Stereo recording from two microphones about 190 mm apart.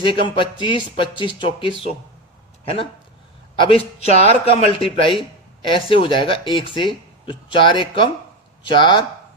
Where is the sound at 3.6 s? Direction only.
30° left (ahead or behind).